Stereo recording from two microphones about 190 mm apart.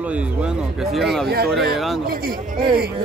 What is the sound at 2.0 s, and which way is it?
Speech, 50° right (ahead or behind).